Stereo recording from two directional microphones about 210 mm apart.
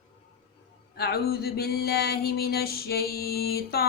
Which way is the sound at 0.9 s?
50° left (ahead or behind).